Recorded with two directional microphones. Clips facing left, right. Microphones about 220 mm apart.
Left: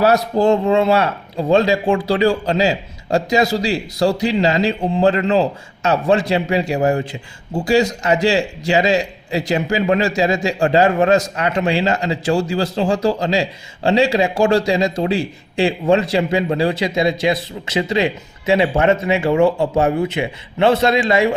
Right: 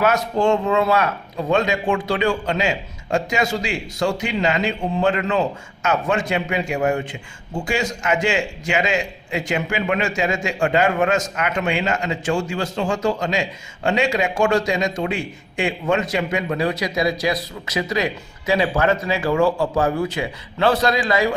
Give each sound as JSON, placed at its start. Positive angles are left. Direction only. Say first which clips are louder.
{"t": 0.0, "sound": "speech", "louder": "left 4 dB", "side_deg": 35}